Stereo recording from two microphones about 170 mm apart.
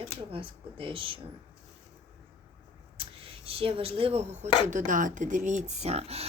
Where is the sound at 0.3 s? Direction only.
30° right (ahead or behind).